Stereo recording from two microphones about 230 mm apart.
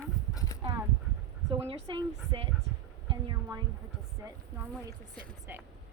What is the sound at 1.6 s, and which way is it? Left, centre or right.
Speech, right.